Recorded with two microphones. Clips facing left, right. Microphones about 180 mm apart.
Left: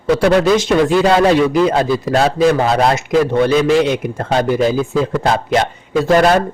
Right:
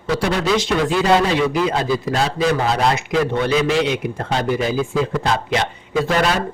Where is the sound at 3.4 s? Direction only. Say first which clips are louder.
Left 5 dB; 45° left (ahead or behind).